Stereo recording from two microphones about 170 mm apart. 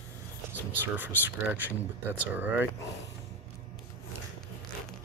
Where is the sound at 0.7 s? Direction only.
10° right (ahead or behind).